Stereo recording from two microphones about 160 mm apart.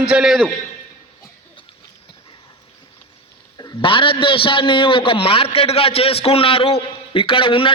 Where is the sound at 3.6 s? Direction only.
30° left (ahead or behind).